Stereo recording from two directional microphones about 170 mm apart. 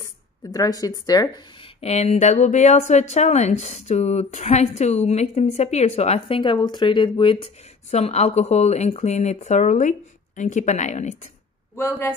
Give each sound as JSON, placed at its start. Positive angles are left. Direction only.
{"t": 0.5, "sound": "speech", "side_deg": 20}
{"t": 1.8, "sound": "a woman's voice", "side_deg": 35}
{"t": 11.7, "sound": "speech", "side_deg": 15}